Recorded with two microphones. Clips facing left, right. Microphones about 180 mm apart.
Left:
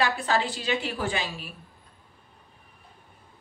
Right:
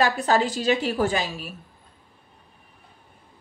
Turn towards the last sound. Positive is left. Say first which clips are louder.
# right 6 dB
turn(degrees=-40)  # may be behind; listen again after turning